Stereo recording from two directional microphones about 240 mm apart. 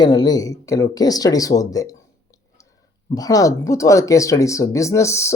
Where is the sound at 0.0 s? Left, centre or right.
Centre.